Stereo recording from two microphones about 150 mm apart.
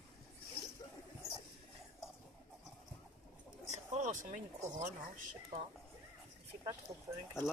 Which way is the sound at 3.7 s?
55° right (ahead or behind).